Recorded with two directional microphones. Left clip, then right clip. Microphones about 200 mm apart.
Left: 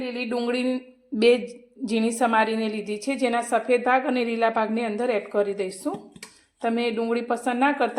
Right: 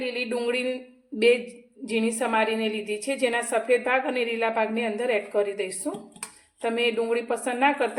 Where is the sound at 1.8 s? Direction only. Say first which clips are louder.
Left 3 dB; 35° left (ahead or behind).